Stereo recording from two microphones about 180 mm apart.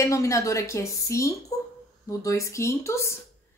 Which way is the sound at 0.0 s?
15° left (ahead or behind).